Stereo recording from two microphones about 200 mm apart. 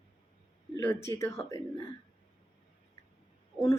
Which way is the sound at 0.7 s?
15° left (ahead or behind).